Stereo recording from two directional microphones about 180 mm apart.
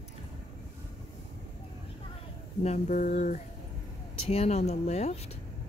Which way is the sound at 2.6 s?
40° left (ahead or behind).